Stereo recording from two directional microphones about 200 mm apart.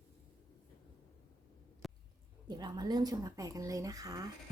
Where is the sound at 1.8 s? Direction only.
Centre (ahead or behind).